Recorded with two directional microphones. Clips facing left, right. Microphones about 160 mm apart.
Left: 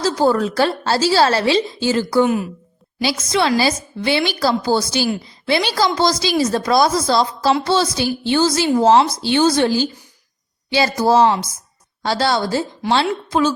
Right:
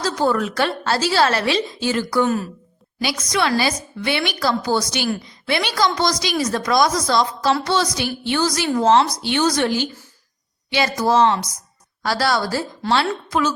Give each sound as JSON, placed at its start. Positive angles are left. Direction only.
{"t": 0.0, "sound": "a woman's voice", "side_deg": 30}
{"t": 2.2, "sound": "a woman's voice", "side_deg": 15}
{"t": 3.0, "sound": "a woman's voice", "side_deg": 30}